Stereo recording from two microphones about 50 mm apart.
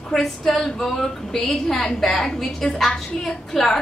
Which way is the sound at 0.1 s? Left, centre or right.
Centre.